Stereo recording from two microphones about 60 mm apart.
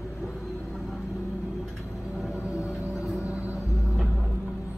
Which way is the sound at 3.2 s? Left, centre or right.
Right.